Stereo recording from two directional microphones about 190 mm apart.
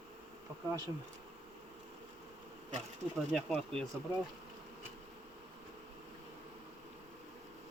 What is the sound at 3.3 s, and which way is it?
Speech, 5° left (ahead or behind).